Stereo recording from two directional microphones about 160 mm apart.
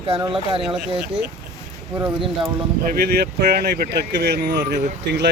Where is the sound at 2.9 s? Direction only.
70° right (ahead or behind).